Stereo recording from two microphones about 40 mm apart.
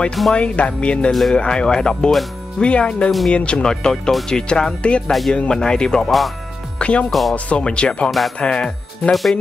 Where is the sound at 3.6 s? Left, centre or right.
Centre.